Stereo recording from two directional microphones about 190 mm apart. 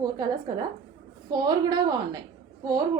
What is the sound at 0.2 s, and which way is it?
A woman's voice, 20° right (ahead or behind).